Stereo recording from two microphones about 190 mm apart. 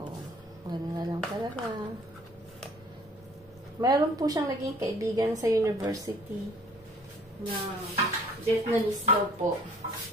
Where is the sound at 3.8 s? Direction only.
20° right (ahead or behind).